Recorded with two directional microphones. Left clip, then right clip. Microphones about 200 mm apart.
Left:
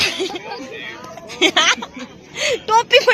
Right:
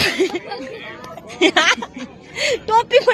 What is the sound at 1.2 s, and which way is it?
Speech, 20° right (ahead or behind).